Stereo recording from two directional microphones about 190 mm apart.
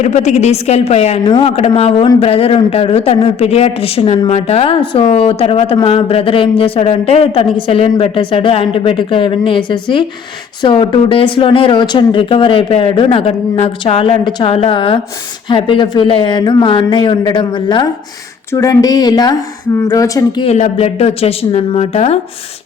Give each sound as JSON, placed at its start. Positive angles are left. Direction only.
{"t": 0.0, "sound": "speech", "side_deg": 40}
{"t": 1.2, "sound": "a man's voice", "side_deg": 20}